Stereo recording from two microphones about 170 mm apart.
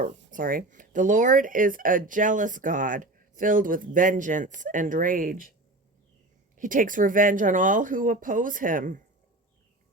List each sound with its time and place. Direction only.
0.3 s speech: 55° right (ahead or behind)
6.6 s speech: 50° right (ahead or behind)